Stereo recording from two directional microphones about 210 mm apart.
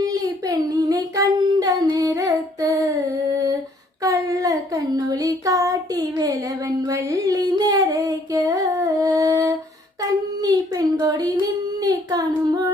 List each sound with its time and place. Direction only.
0.0 s humming: 15° right (ahead or behind)
4.0 s child singing: 15° right (ahead or behind)
6.8 s music: 15° right (ahead or behind)
10.4 s a sound: 15° right (ahead or behind)
11.8 s child singing: 20° right (ahead or behind)